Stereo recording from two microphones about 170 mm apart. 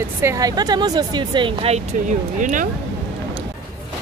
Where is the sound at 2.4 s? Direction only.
50° right (ahead or behind).